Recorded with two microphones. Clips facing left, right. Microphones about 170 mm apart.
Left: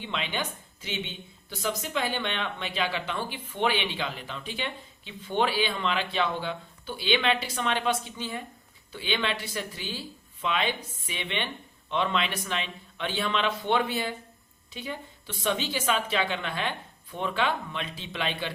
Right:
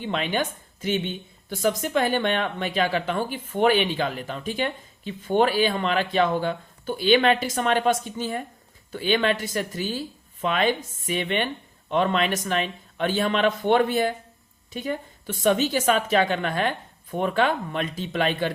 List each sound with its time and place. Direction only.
0.0 s a woman's voice: 45° right (ahead or behind)